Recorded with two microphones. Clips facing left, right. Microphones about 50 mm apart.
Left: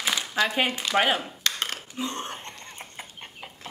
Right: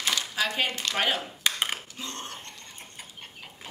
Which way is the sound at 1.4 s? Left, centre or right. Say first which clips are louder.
Right 1 dB; centre.